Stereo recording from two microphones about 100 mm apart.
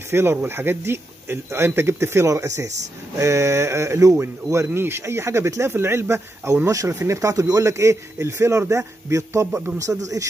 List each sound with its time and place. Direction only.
0.1 s speech: 25° right (ahead or behind)